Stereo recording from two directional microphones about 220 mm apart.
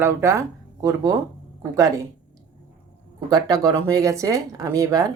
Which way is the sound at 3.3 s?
15° right (ahead or behind).